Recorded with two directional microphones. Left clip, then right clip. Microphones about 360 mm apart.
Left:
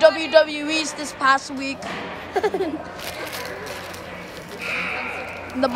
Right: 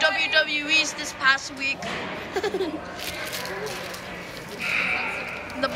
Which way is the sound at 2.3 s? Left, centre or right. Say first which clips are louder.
Left 5 dB; left.